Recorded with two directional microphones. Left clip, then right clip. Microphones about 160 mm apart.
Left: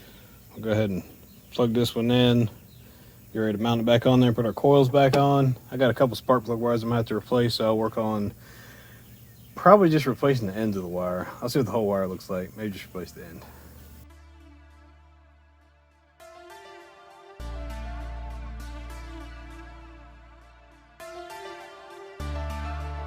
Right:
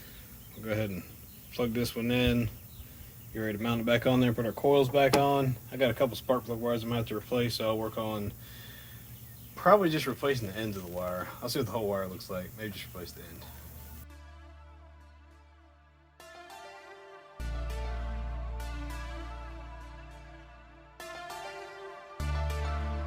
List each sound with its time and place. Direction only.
0.5 s a man's voice: 65° left (ahead or behind)
9.6 s speech: 65° left (ahead or behind)